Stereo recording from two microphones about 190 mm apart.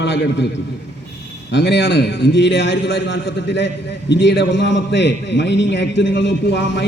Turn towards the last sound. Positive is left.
turn(degrees=65)  # may be behind; listen again after turning